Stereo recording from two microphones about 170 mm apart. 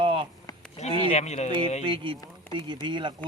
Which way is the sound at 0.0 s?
30° right (ahead or behind).